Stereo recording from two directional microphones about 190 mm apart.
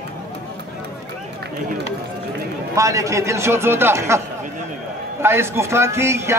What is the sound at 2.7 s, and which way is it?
A man's voice, 15° right (ahead or behind).